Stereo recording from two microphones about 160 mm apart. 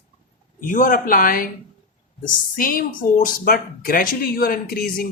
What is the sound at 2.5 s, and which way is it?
Speech, 60° left (ahead or behind).